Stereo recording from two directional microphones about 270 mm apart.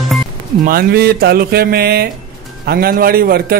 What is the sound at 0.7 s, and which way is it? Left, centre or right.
A man's voice, right.